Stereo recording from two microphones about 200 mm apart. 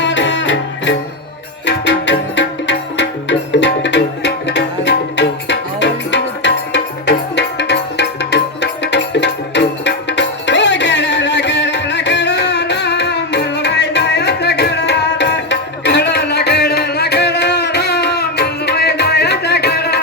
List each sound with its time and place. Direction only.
0.0 s music: 65° left (ahead or behind)